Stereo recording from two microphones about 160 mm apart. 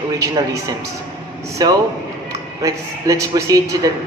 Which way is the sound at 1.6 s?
25° right (ahead or behind).